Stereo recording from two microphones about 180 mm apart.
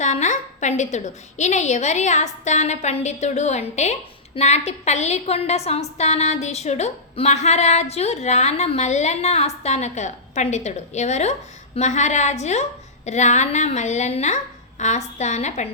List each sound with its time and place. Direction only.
0.0 s a woman's voice: 40° left (ahead or behind)